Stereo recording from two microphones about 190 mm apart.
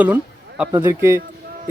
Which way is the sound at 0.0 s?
5° right (ahead or behind).